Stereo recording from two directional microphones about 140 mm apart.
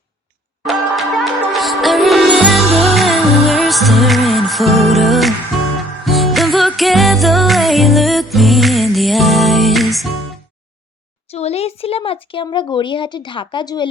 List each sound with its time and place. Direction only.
0.6 s music: centre (ahead or behind)
11.3 s speech: 50° left (ahead or behind)